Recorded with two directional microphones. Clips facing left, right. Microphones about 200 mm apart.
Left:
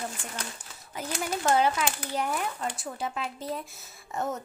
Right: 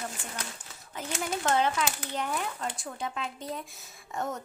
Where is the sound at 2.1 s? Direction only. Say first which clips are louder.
Left 2 dB; 10° left (ahead or behind).